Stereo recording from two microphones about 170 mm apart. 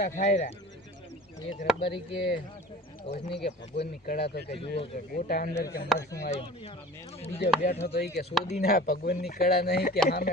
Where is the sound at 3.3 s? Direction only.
90° left.